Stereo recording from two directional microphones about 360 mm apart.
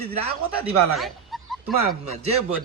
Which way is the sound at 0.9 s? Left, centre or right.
Centre.